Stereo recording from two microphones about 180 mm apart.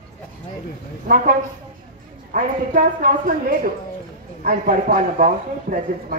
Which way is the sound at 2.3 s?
50° right (ahead or behind).